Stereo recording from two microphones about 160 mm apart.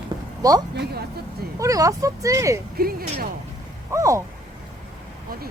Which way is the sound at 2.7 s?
70° right (ahead or behind).